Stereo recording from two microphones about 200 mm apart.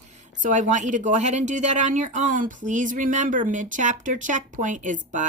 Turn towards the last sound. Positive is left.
turn(degrees=-40)  # may be behind; listen again after turning